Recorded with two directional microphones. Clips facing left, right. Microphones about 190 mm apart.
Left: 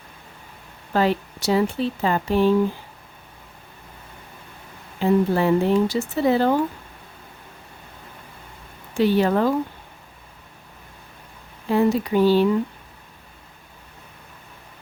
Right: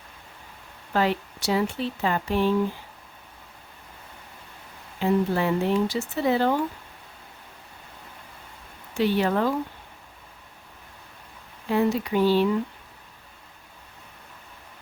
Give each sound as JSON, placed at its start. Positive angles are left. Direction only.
{"t": 0.9, "sound": "speech", "side_deg": 35}
{"t": 4.9, "sound": "speech", "side_deg": 35}
{"t": 9.0, "sound": "speech", "side_deg": 40}
{"t": 11.7, "sound": "speech", "side_deg": 40}